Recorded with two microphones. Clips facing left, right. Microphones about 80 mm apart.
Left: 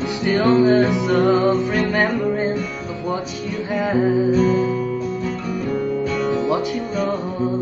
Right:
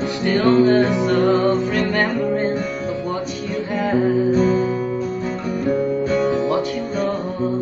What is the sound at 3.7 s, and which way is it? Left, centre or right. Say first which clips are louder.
Music: even; centre.